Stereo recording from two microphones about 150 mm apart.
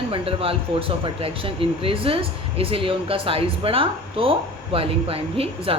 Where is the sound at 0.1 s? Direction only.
40° right (ahead or behind).